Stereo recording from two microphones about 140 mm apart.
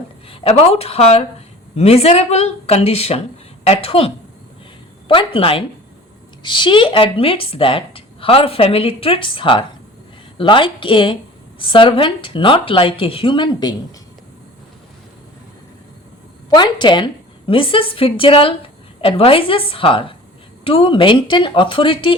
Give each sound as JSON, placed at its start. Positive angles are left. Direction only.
{"t": 0.3, "sound": "a woman's voice", "side_deg": 45}
{"t": 16.6, "sound": "a woman's voice", "side_deg": 35}